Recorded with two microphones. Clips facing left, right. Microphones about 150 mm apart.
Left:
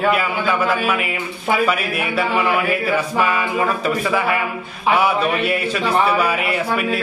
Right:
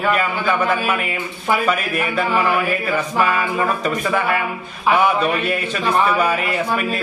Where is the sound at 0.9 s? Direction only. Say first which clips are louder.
Left 1 dB; 5° left (ahead or behind).